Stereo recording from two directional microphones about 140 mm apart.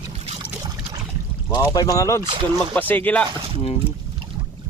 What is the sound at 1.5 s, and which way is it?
Speech, 30° left (ahead or behind).